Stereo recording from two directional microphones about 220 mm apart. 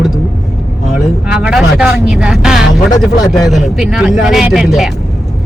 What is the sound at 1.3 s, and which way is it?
Speech, 5° right (ahead or behind).